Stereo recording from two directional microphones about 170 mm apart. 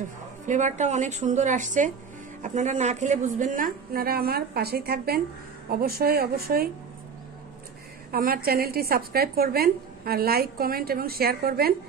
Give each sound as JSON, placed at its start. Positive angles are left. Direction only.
{"t": 0.0, "sound": "a woman's voice", "side_deg": -45}
{"t": 8.1, "sound": "a woman's voice", "side_deg": -60}